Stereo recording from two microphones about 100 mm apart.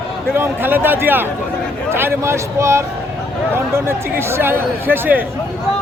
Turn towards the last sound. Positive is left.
turn(degrees=-20)  # may be behind; listen again after turning